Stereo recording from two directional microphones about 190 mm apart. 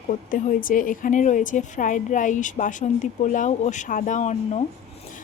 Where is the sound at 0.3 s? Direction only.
45° left (ahead or behind).